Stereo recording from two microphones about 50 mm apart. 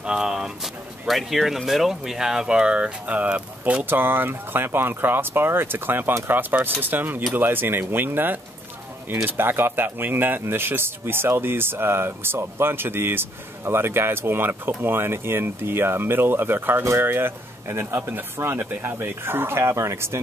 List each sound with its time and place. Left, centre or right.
0.0 s a sound: centre
1.0 s speech: centre; by 3.8 s right
3.9 s speech: right